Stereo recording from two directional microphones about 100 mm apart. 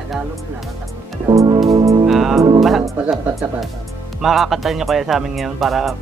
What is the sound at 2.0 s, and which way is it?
Music, 5° right (ahead or behind).